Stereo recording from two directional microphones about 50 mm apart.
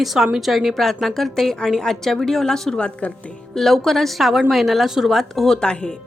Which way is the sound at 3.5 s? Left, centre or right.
Centre.